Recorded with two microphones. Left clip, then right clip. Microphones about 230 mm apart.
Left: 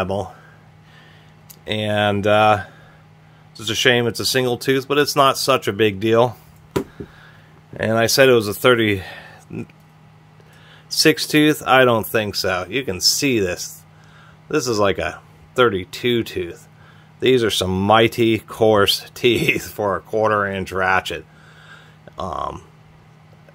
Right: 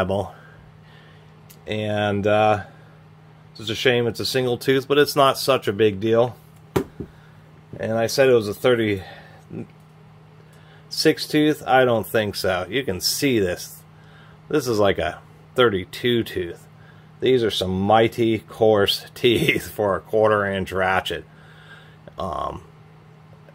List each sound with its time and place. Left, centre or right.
0.0 s speech: centre
1.7 s speech: centre
7.7 s speech: left
10.9 s speech: left; by 16.6 s centre
17.2 s speech: left; by 21.2 s centre
21.6 s a sound: centre